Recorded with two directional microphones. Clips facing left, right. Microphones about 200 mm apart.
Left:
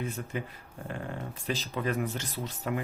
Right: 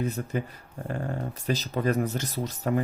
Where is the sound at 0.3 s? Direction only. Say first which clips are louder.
Right 5 dB; 40° right (ahead or behind).